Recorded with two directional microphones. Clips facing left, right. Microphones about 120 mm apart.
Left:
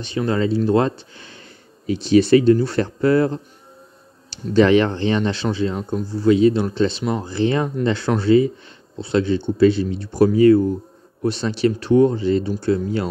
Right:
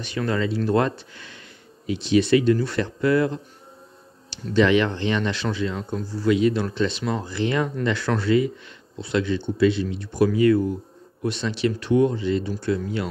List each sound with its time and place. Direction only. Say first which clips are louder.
0.0 s speech: left 4 dB; 25° left (ahead or behind)